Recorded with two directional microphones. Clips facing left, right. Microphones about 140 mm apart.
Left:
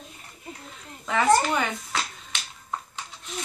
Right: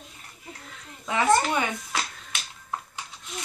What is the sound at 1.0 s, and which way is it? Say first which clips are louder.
Speech: left 1 dB; 5° right (ahead or behind).